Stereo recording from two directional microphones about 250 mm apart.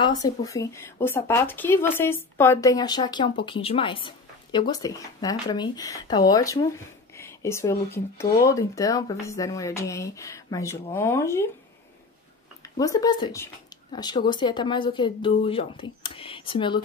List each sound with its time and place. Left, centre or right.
0.2 s speech: centre
12.7 s speech: centre